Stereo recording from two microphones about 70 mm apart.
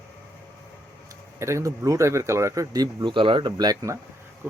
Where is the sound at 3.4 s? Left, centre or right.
Right.